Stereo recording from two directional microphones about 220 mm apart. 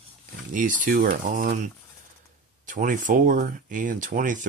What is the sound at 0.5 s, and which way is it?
Speech, 35° right (ahead or behind).